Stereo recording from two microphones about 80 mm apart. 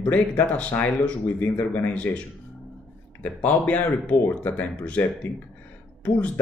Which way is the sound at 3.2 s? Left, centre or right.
Centre.